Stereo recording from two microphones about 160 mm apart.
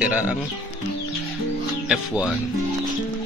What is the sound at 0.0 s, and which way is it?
Speech, 10° right (ahead or behind).